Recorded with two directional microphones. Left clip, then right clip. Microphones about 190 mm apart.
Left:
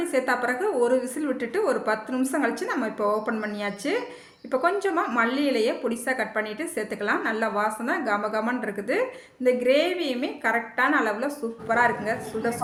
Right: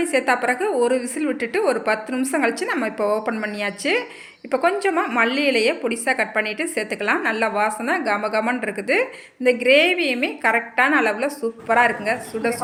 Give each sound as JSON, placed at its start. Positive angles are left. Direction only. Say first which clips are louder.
{"t": 0.0, "sound": "a woman's voice", "louder": "right 5 dB", "side_deg": -20}